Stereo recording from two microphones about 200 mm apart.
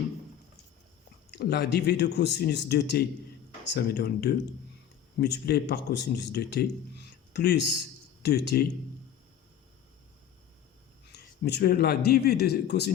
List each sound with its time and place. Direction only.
1.3 s speech: 55° left (ahead or behind)
11.1 s a man's voice: 55° left (ahead or behind)